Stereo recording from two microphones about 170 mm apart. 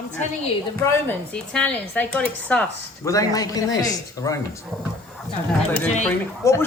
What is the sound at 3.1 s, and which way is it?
A man's voice, 20° left (ahead or behind).